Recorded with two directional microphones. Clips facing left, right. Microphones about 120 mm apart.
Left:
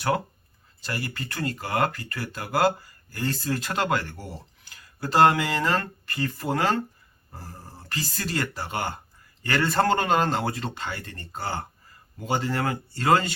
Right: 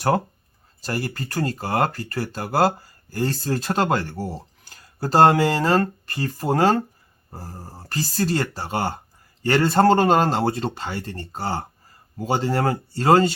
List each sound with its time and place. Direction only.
0.8 s speech: 40° right (ahead or behind)